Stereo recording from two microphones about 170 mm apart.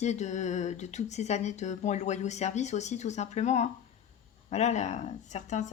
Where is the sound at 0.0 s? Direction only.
40° left (ahead or behind).